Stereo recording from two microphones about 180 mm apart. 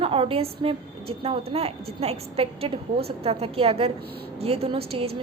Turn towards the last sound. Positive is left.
turn(degrees=-35)  # may be behind; listen again after turning